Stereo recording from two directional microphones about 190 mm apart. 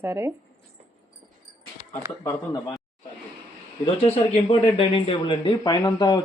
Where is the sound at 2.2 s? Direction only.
20° left (ahead or behind).